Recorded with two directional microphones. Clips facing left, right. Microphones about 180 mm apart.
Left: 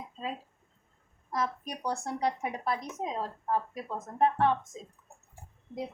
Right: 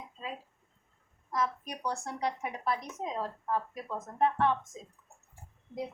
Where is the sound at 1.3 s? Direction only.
35° left (ahead or behind).